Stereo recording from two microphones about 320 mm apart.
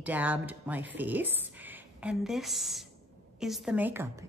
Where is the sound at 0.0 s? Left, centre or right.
Centre.